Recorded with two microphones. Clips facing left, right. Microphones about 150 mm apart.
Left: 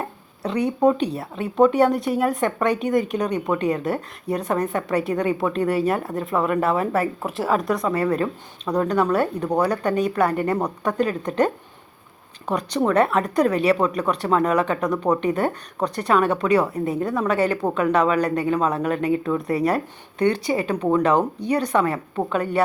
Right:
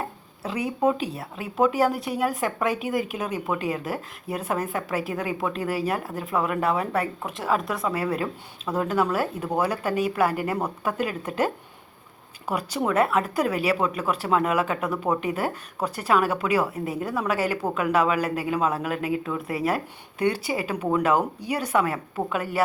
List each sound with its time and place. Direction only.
0.4 s a woman's voice: 5° right (ahead or behind)